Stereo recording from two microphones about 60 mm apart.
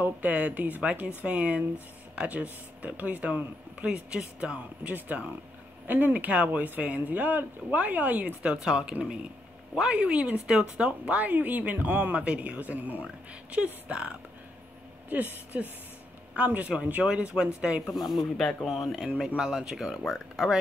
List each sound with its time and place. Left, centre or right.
0.0 s speech: right
17.8 s speech: centre
20.0 s speech: centre